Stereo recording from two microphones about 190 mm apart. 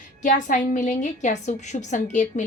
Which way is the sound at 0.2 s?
45° left (ahead or behind).